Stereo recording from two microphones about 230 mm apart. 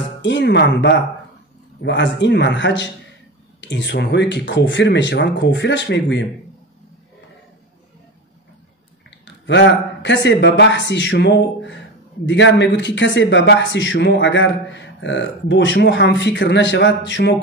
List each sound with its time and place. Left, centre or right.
0.2 s speech: left
9.2 s speech: left